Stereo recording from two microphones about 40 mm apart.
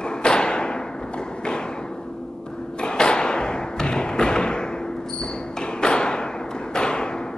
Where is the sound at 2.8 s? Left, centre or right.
Left.